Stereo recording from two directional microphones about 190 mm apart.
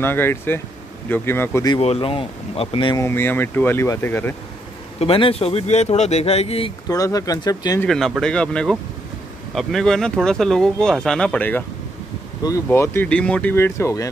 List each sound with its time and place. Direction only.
0.0 s speech: 10° left (ahead or behind)
1.8 s speech: 30° left (ahead or behind)
3.0 s speech: 10° left (ahead or behind)
4.9 s speech: 30° left (ahead or behind)
6.9 s speech: 15° left (ahead or behind)
7.8 s speech: centre (ahead or behind)
12.6 s speech: 15° left (ahead or behind)